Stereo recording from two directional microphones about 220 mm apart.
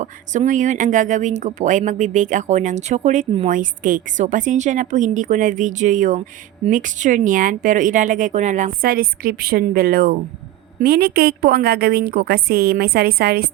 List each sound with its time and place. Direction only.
0.0 s a woman's voice: 35° right (ahead or behind)